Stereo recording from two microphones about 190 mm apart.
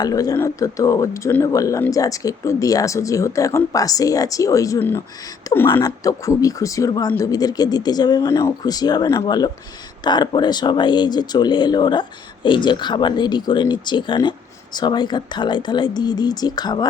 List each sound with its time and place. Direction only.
0.0 s speech: 20° left (ahead or behind)